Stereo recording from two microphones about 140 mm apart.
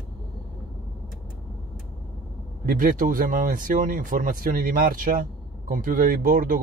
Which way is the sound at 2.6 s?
85° right.